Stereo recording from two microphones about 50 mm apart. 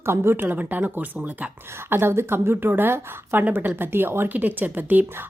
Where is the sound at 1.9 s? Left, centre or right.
Right.